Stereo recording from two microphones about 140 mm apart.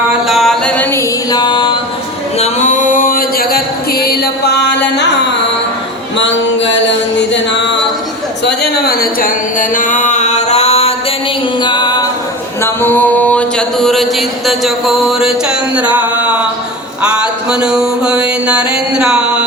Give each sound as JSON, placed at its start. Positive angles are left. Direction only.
{"t": 0.3, "sound": "mantra", "side_deg": 0}
{"t": 0.9, "sound": "music", "side_deg": 30}
{"t": 2.4, "sound": "music", "side_deg": 60}
{"t": 8.9, "sound": "a sound", "side_deg": 90}
{"t": 11.6, "sound": "music", "side_deg": 30}
{"t": 12.6, "sound": "mantra", "side_deg": 15}